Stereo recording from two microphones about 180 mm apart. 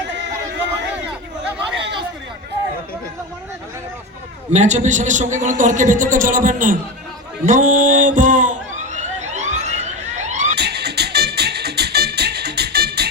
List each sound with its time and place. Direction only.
1.5 s chatter: 5° right (ahead or behind)
4.5 s a man's voice: 40° right (ahead or behind)
7.4 s a sound: 45° right (ahead or behind)
10.6 s music: 65° right (ahead or behind)